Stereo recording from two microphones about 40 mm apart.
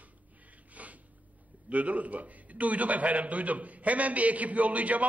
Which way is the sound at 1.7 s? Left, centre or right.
Right.